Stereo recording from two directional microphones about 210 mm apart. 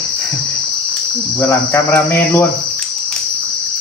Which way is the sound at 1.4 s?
10° left (ahead or behind).